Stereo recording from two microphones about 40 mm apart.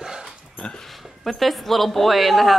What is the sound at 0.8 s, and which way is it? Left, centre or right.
Speech, centre.